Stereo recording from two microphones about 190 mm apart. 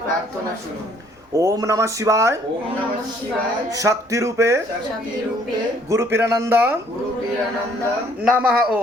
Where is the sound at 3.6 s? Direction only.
15° right (ahead or behind).